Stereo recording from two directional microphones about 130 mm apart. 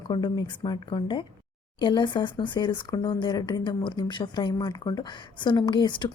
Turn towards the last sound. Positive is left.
turn(degrees=35)  # may be behind; listen again after turning